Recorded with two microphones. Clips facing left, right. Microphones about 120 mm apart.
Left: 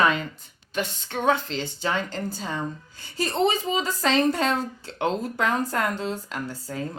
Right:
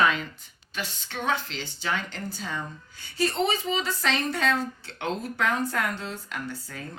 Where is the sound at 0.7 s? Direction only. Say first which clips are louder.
Left 6 dB; 45° left (ahead or behind).